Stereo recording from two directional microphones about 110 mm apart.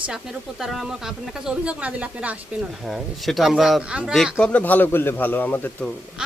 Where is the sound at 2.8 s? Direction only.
Centre (ahead or behind).